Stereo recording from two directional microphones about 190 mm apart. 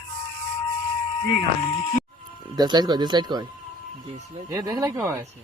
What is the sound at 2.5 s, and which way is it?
Speech, 20° right (ahead or behind).